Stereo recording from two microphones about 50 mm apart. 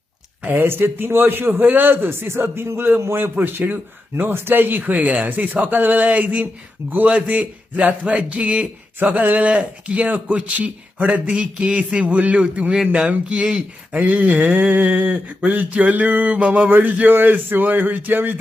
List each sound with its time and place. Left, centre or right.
0.4 s a man's voice: right
3.2 s a man's voice: right; by 14.0 s centre
14.0 s speech: right